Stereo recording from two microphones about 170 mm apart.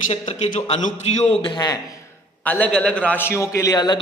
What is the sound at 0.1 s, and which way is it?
A man's voice, 40° left (ahead or behind).